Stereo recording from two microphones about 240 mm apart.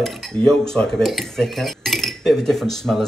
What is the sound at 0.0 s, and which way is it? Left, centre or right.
Speech, centre.